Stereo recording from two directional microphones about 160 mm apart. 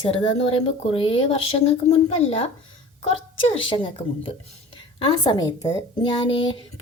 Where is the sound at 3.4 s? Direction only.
35° left (ahead or behind).